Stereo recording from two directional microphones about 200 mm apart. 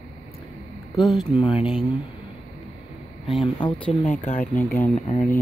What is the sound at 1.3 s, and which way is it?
Speech, 30° left (ahead or behind).